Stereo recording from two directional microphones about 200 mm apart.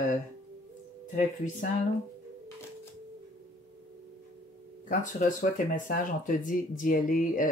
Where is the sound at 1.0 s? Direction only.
40° left (ahead or behind).